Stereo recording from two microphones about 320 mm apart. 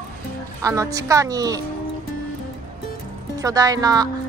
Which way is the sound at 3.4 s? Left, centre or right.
Centre.